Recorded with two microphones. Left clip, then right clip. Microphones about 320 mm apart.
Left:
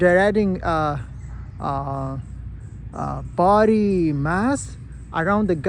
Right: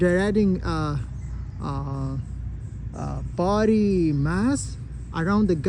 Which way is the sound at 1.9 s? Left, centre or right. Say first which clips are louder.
Left 7 dB; left.